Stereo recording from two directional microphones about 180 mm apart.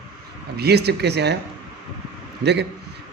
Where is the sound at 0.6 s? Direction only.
65° right (ahead or behind).